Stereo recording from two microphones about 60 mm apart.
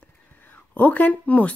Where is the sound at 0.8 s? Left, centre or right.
Left.